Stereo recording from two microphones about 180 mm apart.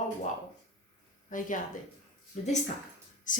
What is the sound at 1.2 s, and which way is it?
Speech, 45° left (ahead or behind).